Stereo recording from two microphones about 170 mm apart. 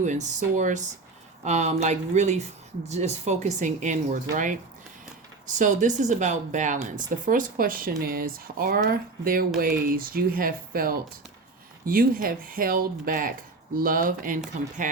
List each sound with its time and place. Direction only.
0.0 s speech: 45° right (ahead or behind)
5.5 s speech: 45° right (ahead or behind)